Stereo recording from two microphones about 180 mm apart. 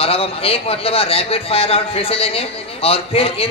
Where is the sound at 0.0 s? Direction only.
30° left (ahead or behind).